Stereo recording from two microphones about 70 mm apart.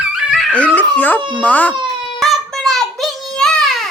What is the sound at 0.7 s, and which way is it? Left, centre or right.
Speech, left.